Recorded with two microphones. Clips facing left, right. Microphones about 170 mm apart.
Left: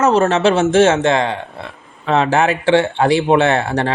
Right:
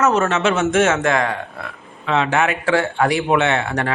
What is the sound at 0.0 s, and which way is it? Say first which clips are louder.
Speech: left 4 dB; 30° left (ahead or behind).